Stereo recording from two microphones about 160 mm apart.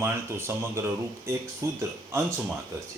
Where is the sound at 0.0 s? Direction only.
15° right (ahead or behind).